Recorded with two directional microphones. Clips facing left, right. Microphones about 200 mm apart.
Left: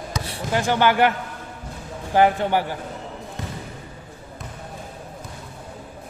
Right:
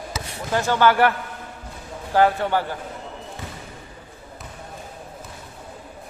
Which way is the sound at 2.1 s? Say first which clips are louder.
Left 1 dB; 15° left (ahead or behind).